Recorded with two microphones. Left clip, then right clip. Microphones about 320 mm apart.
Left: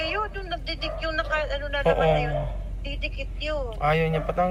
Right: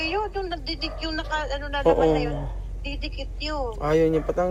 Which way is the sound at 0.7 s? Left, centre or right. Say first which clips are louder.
Left 1 dB; right.